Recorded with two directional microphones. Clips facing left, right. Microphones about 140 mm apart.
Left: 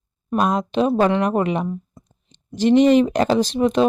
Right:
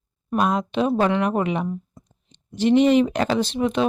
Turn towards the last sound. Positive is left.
turn(degrees=40)  # may be behind; listen again after turning